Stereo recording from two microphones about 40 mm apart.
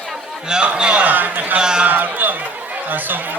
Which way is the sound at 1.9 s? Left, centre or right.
Right.